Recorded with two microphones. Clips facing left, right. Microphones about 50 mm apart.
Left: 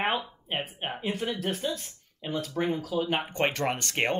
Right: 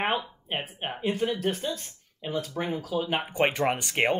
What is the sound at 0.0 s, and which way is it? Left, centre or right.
Speech, centre.